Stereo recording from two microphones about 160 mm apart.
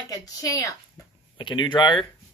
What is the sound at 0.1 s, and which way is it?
Speech, 20° left (ahead or behind).